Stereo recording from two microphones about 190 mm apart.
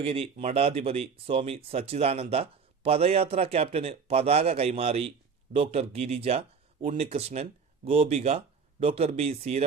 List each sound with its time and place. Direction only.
0.0 s speech: 30° right (ahead or behind)